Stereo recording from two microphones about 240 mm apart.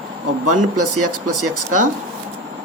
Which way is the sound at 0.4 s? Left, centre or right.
Right.